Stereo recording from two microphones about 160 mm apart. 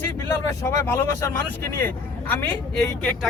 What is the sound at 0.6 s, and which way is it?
Speech, 15° left (ahead or behind).